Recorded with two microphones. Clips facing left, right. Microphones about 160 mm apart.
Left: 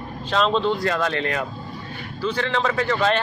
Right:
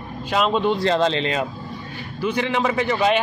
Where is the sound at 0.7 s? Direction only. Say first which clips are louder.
Right 4 dB; 25° right (ahead or behind).